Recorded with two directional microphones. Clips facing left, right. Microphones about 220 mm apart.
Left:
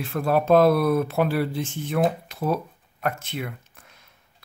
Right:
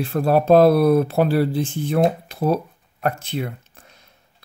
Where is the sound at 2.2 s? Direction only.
35° right (ahead or behind).